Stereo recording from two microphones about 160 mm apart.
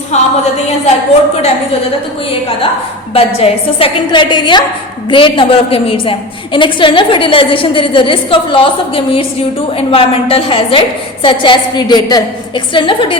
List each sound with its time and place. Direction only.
0.1 s a woman's voice: 45° left (ahead or behind)
3.2 s a woman's voice: 35° left (ahead or behind)